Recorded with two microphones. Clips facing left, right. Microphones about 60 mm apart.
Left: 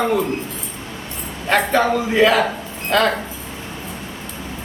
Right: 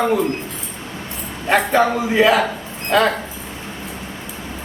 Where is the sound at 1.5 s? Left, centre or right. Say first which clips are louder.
Right 1 dB; centre.